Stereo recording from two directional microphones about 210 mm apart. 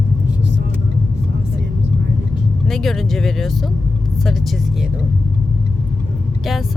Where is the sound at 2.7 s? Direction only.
Centre (ahead or behind).